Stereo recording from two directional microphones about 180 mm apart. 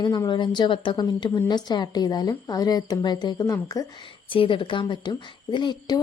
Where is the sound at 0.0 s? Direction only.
25° left (ahead or behind).